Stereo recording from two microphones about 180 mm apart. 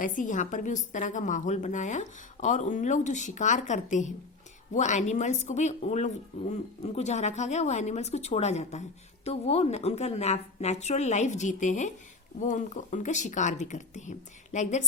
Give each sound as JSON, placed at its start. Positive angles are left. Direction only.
{"t": 0.0, "sound": "a woman's voice", "side_deg": 45}